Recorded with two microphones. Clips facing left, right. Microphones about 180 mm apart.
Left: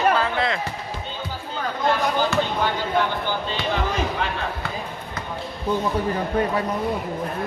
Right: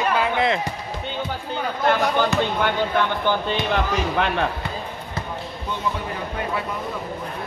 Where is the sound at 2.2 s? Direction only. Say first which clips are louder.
Right 2 dB; 60° right (ahead or behind).